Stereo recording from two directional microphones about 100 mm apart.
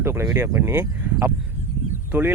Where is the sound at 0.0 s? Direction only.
25° right (ahead or behind).